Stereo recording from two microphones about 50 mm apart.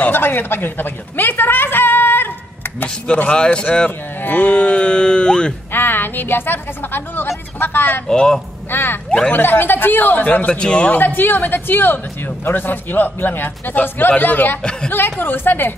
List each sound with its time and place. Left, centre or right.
0.0 s a woman's voice: left
3.1 s speech: left
4.2 s speech: left
5.7 s a woman's voice: left
8.1 s speech: centre
8.6 s speech: left
10.5 s speech: centre
10.9 s a man's voice: left
14.6 s speech: centre
14.9 s speech: left